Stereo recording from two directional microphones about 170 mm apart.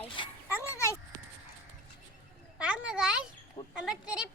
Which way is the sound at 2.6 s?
5° right (ahead or behind).